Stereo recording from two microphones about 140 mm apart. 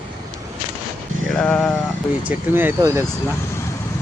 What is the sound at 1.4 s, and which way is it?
Sheep, 10° left (ahead or behind).